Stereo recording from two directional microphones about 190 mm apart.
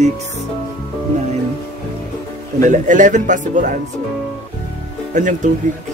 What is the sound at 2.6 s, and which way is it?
A man's voice, 40° right (ahead or behind).